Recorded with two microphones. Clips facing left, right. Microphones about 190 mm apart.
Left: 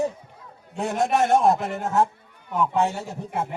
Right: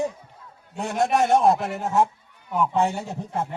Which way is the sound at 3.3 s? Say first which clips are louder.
Even; 10° left (ahead or behind).